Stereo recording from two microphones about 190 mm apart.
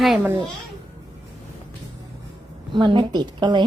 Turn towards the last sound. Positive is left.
turn(degrees=-25)  # may be behind; listen again after turning